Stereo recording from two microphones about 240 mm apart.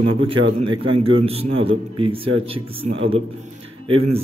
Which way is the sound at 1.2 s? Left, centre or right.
Right.